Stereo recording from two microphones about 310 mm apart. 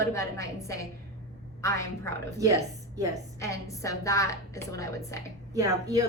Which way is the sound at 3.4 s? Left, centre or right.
Centre.